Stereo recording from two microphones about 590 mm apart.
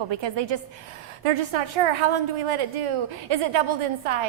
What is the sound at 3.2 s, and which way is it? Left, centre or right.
Speech, right.